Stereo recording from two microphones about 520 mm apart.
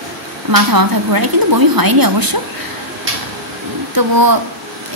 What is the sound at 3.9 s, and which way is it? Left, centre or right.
Speech, right.